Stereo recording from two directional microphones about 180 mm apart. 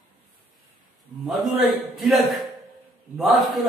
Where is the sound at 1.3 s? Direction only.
Centre (ahead or behind).